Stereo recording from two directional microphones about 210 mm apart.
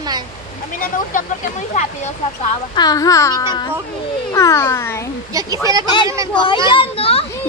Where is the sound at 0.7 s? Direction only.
40° left (ahead or behind).